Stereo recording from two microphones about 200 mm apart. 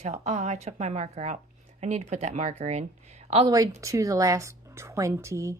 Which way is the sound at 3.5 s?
20° right (ahead or behind).